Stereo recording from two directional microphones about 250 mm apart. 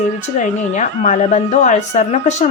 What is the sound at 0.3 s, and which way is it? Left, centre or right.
Speech, left.